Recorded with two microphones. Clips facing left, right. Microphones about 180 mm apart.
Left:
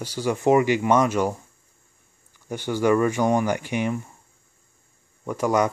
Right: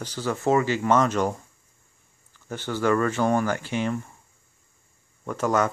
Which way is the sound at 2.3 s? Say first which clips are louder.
Left 3 dB; 15° left (ahead or behind).